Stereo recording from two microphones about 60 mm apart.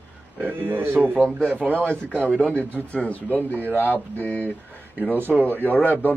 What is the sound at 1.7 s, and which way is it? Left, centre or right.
A man's voice, left.